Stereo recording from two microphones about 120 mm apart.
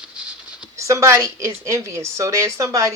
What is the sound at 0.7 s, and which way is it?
A woman's voice, 25° right (ahead or behind).